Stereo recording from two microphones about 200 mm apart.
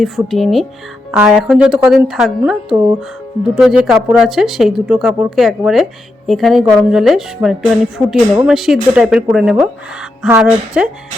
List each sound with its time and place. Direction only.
0.3 s speech: centre (ahead or behind)